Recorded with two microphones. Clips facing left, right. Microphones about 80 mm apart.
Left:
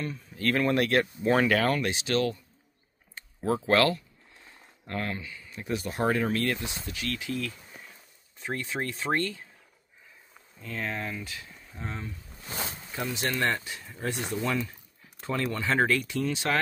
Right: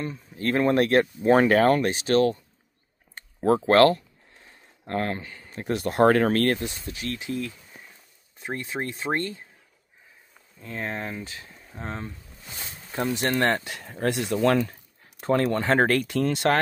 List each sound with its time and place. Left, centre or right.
0.0 s speech: right
6.9 s speech: right
10.6 s speech: right